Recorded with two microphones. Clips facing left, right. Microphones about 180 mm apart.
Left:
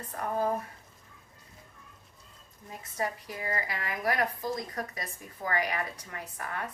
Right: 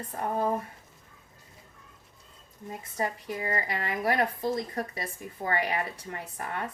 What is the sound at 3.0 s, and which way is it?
Speech, 25° right (ahead or behind).